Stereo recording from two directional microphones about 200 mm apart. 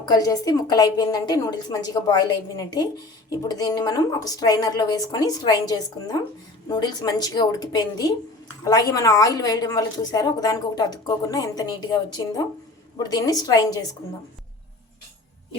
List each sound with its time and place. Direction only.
0.0 s speech: 20° left (ahead or behind)